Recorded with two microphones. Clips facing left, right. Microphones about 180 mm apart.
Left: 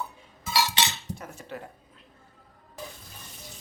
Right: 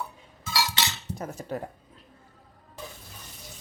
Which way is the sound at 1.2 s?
40° right (ahead or behind).